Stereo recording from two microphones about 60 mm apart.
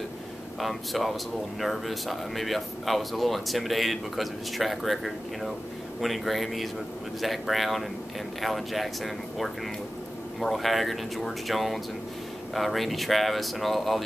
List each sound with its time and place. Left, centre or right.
0.6 s speech: centre